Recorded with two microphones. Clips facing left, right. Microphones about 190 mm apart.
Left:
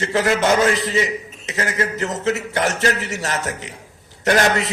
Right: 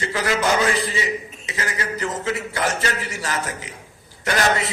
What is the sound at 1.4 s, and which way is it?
A man's voice, 45° left (ahead or behind).